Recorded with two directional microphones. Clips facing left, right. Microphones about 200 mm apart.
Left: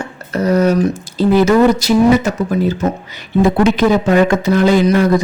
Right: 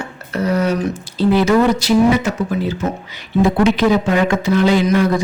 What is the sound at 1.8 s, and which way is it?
Speech, 40° left (ahead or behind).